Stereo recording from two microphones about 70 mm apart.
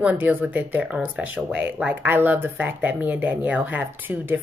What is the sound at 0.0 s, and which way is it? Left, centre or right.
Speech, right.